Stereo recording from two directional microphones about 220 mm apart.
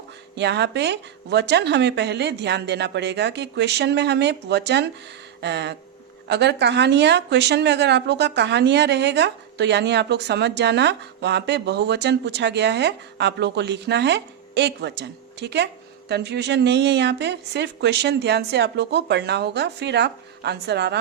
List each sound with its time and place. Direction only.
0.3 s speech: 50° right (ahead or behind)